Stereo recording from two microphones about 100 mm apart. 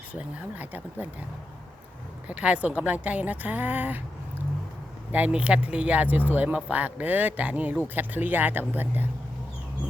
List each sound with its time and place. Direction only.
0.1 s a woman's voice: 15° right (ahead or behind)
2.2 s a woman's voice: 15° right (ahead or behind)
5.1 s a woman's voice: 15° right (ahead or behind)